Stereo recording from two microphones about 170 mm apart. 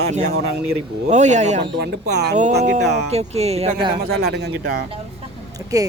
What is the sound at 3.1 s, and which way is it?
Speech, 40° right (ahead or behind).